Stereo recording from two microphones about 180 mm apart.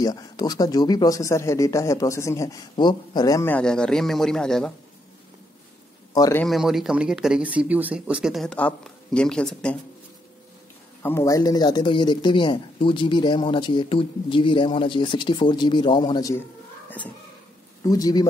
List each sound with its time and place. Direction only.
0.0 s a man's voice: 20° left (ahead or behind); by 4.7 s 5° left (ahead or behind)
6.1 s a man's voice: 20° left (ahead or behind)
6.4 s speech: centre (ahead or behind)
11.0 s a man's voice: 15° left (ahead or behind)
17.8 s a man's voice: 20° left (ahead or behind)